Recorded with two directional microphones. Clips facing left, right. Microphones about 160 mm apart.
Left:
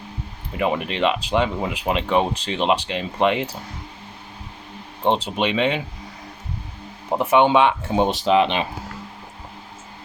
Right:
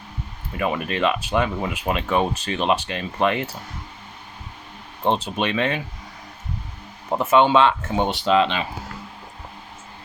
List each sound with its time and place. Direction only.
0.5 s speech: 20° left (ahead or behind)
5.0 s speech: 15° left (ahead or behind)
7.1 s speech: 15° left (ahead or behind)